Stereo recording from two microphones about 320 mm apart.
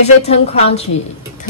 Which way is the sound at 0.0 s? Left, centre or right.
Centre.